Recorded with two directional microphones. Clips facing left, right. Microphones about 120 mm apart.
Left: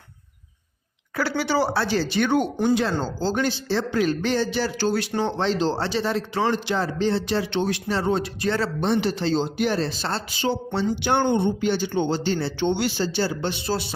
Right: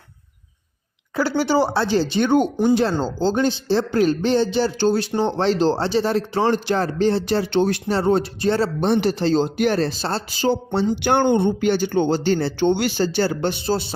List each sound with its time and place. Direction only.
1.5 s speech: 25° right (ahead or behind)
5.5 s speech: 40° right (ahead or behind)
5.7 s speech: 30° right (ahead or behind)
6.5 s speech: 50° right (ahead or behind); by 8.7 s 30° right (ahead or behind)
8.8 s speech: 45° right (ahead or behind)
9.9 s speech: 35° right (ahead or behind)
11.0 s speech: 50° right (ahead or behind)
13.7 s speech: 30° right (ahead or behind)